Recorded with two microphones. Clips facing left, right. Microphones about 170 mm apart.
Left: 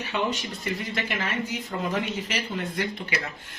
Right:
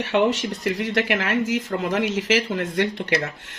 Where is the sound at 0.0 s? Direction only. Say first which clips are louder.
Right 8 dB; 85° right.